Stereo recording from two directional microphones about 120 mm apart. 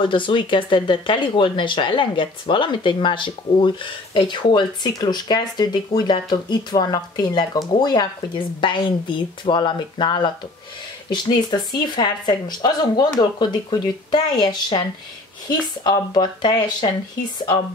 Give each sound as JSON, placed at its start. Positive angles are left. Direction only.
{"t": 0.0, "sound": "speech", "side_deg": 45}
{"t": 15.8, "sound": "speech", "side_deg": 35}